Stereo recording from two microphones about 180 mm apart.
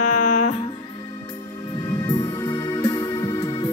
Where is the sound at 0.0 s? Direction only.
45° left (ahead or behind).